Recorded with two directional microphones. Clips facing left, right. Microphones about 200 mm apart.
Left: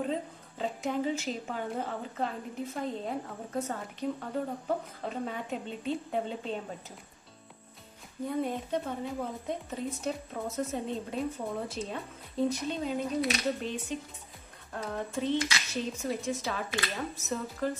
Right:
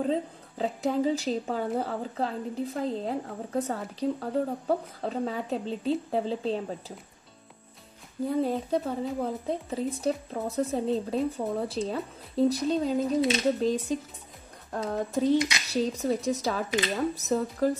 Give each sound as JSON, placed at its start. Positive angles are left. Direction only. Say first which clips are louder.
{"t": 0.1, "sound": "a woman's voice", "louder": "right 5 dB", "side_deg": -35}
{"t": 8.3, "sound": "a woman's voice", "louder": "right 5 dB", "side_deg": -35}
{"t": 15.3, "sound": "a sound", "louder": "right 5 dB", "side_deg": -20}
{"t": 15.7, "sound": "a woman's voice", "louder": "right 8 dB", "side_deg": -35}